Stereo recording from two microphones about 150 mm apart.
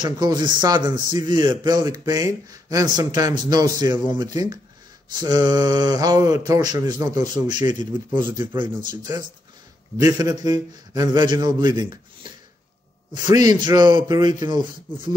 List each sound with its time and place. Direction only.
0.0 s speech: 30° right (ahead or behind)
13.1 s speech: 25° right (ahead or behind)